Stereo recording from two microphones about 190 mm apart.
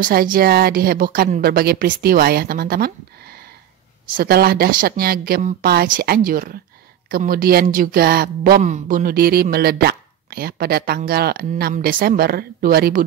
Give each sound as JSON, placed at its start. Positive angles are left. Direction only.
{"t": 0.0, "sound": "a woman's voice", "side_deg": -50}